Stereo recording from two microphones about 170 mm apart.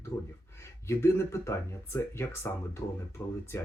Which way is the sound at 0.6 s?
15° left (ahead or behind).